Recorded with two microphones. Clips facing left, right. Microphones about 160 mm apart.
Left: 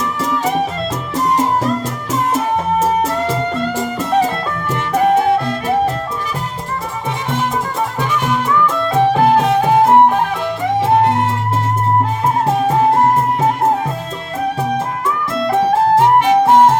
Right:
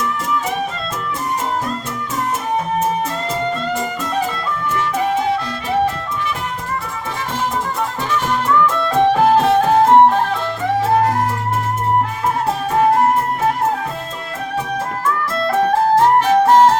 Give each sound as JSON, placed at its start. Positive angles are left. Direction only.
{"t": 2.7, "sound": "music", "side_deg": 80}
{"t": 4.7, "sound": "music", "side_deg": 50}
{"t": 8.1, "sound": "music", "side_deg": 10}
{"t": 10.8, "sound": "music", "side_deg": 25}
{"t": 15.4, "sound": "music", "side_deg": 15}